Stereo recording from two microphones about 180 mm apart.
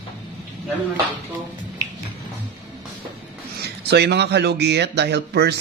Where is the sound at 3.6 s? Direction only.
65° right (ahead or behind).